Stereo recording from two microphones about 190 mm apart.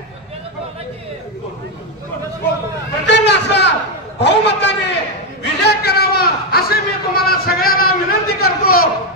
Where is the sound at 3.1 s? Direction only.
65° left (ahead or behind).